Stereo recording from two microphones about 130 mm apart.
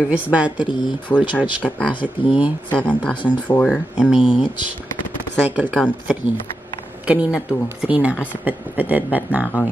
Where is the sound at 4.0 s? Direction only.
5° right (ahead or behind).